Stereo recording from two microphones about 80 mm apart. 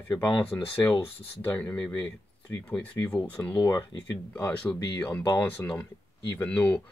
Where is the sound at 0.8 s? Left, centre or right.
Left.